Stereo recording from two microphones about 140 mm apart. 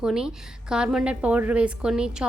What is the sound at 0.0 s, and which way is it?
A woman's voice, 5° right (ahead or behind).